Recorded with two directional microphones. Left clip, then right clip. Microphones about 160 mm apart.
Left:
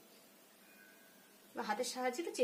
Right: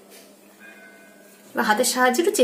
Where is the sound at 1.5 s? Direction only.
10° left (ahead or behind).